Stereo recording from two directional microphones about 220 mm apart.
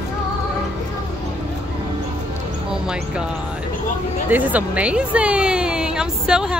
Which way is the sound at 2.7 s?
5° right (ahead or behind).